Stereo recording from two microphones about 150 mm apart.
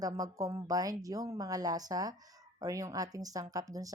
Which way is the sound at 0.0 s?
25° right (ahead or behind).